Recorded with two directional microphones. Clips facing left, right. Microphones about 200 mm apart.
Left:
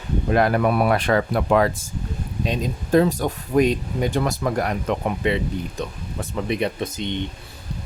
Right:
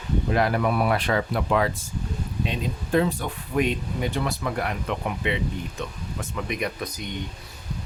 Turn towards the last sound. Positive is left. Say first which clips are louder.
# left 6 dB
turn(degrees=25)  # may be behind; listen again after turning